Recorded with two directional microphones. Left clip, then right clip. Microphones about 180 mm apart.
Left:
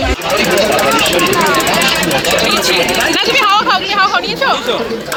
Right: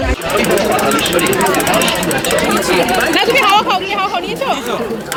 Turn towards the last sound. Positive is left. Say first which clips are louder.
# left 4 dB
turn(degrees=-20)  # may be behind; listen again after turning